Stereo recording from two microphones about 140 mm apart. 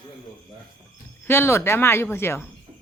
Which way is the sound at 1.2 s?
15° left (ahead or behind).